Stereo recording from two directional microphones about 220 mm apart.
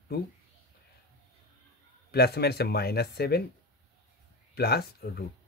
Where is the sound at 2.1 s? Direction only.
45° left (ahead or behind).